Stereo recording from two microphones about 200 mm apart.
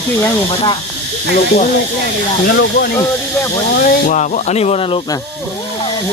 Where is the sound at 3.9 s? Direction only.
40° left (ahead or behind).